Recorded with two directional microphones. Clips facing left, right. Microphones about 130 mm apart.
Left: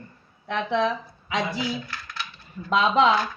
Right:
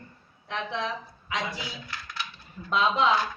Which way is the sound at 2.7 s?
90° left.